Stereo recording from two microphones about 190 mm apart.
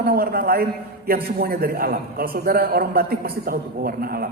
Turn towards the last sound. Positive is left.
turn(degrees=-50)  # may be behind; listen again after turning